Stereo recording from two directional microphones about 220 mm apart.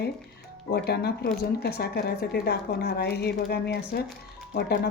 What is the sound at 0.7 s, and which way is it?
Speech, 45° left (ahead or behind).